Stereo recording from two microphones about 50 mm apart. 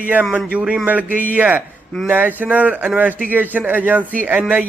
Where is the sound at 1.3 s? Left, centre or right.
Right.